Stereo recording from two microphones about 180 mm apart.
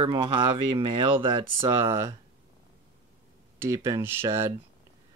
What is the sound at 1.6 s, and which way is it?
Speech, 15° right (ahead or behind).